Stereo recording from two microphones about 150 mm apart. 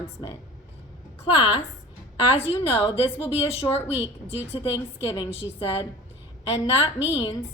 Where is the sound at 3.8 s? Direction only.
15° right (ahead or behind).